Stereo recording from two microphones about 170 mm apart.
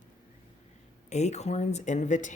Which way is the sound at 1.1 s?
40° left (ahead or behind).